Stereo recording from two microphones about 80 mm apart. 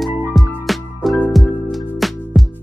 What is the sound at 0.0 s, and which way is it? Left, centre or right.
Music, centre.